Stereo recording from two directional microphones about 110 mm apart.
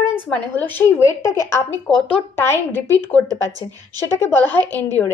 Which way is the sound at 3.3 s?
35° right (ahead or behind).